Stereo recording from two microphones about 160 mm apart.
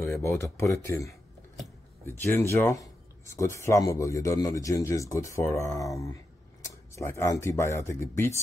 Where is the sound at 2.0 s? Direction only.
15° left (ahead or behind).